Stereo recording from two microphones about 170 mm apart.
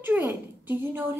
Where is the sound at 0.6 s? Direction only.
10° right (ahead or behind).